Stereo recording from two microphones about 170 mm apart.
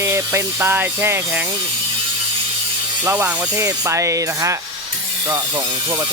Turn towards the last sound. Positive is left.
turn(degrees=-20)  # may be behind; listen again after turning